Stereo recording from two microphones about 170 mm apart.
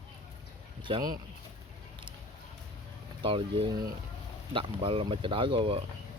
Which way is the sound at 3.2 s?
30° right (ahead or behind).